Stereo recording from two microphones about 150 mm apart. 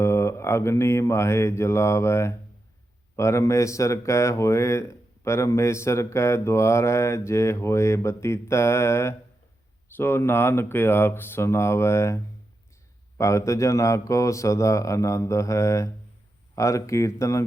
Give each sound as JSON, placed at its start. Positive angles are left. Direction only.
{"t": 0.0, "sound": "mantra", "side_deg": 20}
{"t": 3.2, "sound": "speech", "side_deg": 20}